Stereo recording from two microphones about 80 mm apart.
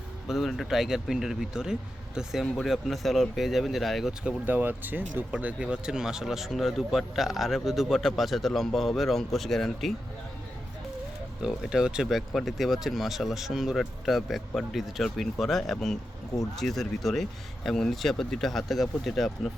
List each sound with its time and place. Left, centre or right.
0.3 s speech: centre
4.4 s speech: right; by 9.9 s centre
11.4 s speech: centre